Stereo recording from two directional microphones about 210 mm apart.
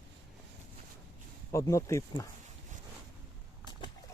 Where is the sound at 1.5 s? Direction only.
15° left (ahead or behind).